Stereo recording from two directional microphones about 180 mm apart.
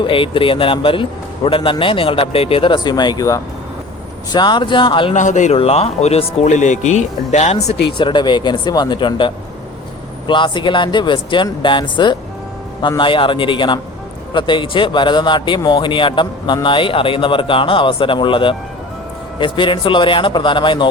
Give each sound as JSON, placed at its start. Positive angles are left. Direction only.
{"t": 0.1, "sound": "a man's voice", "side_deg": 30}
{"t": 5.1, "sound": "a man's voice", "side_deg": 45}